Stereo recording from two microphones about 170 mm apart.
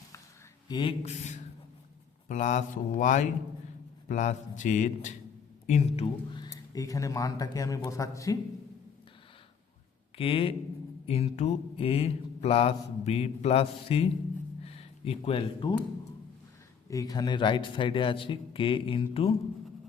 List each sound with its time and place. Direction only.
0.7 s mantra: 30° left (ahead or behind)
2.2 s speech: 45° left (ahead or behind)
5.6 s mantra: 40° left (ahead or behind)
6.3 s a man's voice: 20° left (ahead or behind)
10.2 s mantra: 35° left (ahead or behind)
14.6 s a sound: 35° left (ahead or behind)
16.9 s a man's voice: 20° left (ahead or behind)